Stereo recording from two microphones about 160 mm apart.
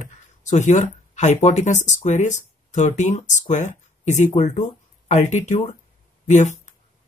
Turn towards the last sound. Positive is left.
turn(degrees=50)  # may be behind; listen again after turning